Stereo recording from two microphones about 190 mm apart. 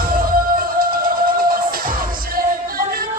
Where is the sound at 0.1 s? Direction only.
50° right (ahead or behind).